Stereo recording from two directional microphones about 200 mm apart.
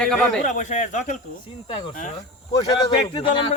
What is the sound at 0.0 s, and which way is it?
Speech, 5° left (ahead or behind).